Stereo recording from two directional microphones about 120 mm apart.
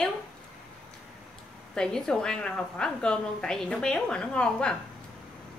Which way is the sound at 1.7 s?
5° left (ahead or behind).